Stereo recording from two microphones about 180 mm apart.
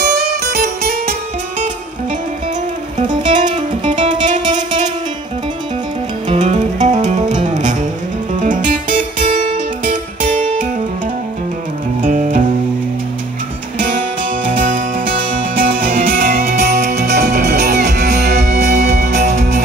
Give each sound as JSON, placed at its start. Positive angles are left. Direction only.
{"t": 3.1, "sound": "music", "side_deg": -25}
{"t": 6.3, "sound": "music", "side_deg": -40}
{"t": 12.0, "sound": "music", "side_deg": -45}
{"t": 15.6, "sound": "music", "side_deg": -50}
{"t": 19.1, "sound": "music", "side_deg": -40}